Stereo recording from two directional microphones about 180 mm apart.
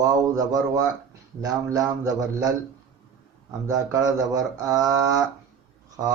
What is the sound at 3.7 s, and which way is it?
Speech, 20° right (ahead or behind).